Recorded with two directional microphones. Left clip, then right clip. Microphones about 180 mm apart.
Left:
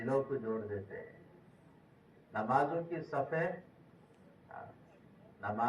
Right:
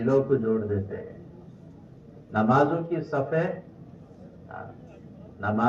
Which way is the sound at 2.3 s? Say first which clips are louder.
Right 10 dB; 25° right (ahead or behind).